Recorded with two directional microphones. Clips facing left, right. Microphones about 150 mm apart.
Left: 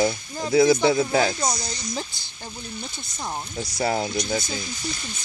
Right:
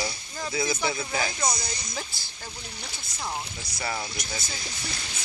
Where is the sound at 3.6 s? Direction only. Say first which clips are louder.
Left 9 dB; 45° left (ahead or behind).